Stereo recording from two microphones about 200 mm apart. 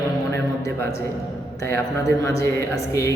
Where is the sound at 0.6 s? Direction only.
15° left (ahead or behind).